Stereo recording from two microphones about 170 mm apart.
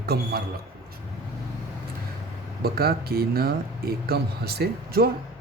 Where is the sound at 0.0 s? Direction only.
70° right (ahead or behind).